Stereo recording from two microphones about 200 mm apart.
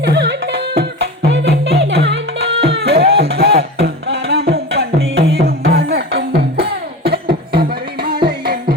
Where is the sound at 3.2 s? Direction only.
50° right (ahead or behind).